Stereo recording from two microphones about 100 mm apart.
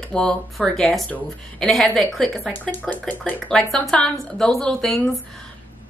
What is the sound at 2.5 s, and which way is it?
Speech, 20° left (ahead or behind).